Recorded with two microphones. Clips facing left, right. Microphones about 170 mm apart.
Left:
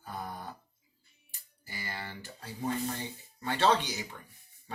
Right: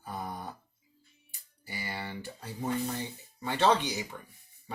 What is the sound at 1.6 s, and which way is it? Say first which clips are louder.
Speech: right 3 dB; 15° right (ahead or behind).